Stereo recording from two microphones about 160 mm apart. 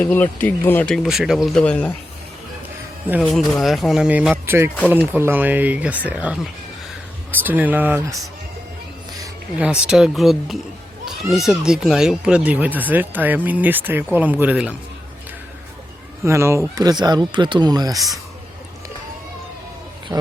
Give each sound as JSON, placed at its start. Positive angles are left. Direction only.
{"t": 0.0, "sound": "speech", "side_deg": 10}
{"t": 3.3, "sound": "speech", "side_deg": 0}
{"t": 9.8, "sound": "speech", "side_deg": -5}
{"t": 16.2, "sound": "speech", "side_deg": -15}
{"t": 20.1, "sound": "speech", "side_deg": -10}